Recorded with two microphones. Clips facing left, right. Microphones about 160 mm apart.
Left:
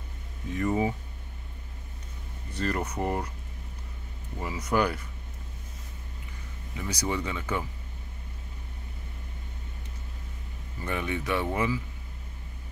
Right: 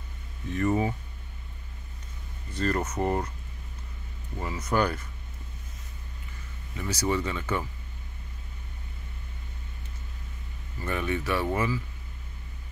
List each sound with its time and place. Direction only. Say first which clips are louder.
0.5 s speech: right 1 dB; 10° left (ahead or behind)
2.5 s speech: right 2 dB; 10° left (ahead or behind)
4.4 s speech: even; 10° left (ahead or behind)
6.7 s speech: right 3 dB; 15° left (ahead or behind)
10.8 s speech: right 2 dB; 15° left (ahead or behind)